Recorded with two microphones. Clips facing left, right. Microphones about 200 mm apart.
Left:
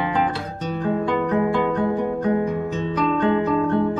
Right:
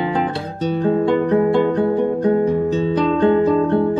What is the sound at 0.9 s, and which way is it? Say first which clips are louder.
Music: right 5 dB; 35° right (ahead or behind).